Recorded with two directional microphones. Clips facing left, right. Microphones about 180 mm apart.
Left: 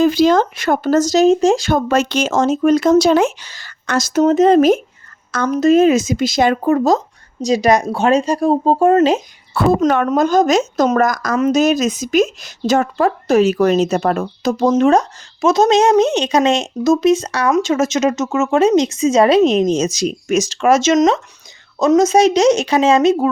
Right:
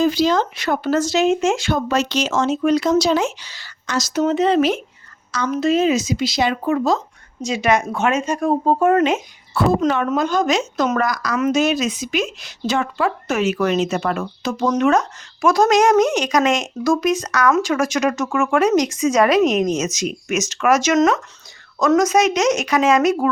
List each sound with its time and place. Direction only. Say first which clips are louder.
0.0 s speech: left 5 dB; 55° left (ahead or behind); by 9.2 s 30° left (ahead or behind)
9.8 s speech: left 4 dB; 55° left (ahead or behind)
10.1 s speech: left 5 dB; 45° left (ahead or behind)
11.3 s speech: left 4 dB; 35° left (ahead or behind)